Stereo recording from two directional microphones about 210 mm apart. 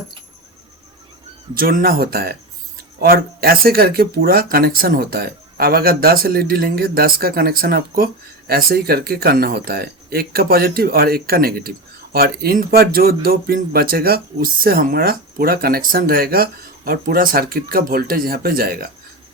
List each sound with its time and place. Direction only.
1.5 s speech: 45° right (ahead or behind)